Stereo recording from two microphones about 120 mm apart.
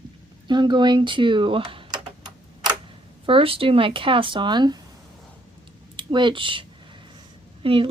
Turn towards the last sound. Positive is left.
turn(degrees=-50)  # may be behind; listen again after turning